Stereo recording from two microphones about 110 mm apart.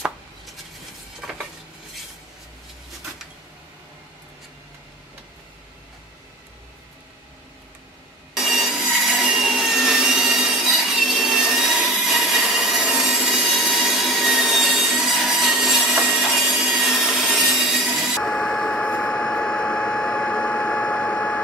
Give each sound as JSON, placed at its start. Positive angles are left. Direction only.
{"t": 8.4, "sound": "wood", "side_deg": -5}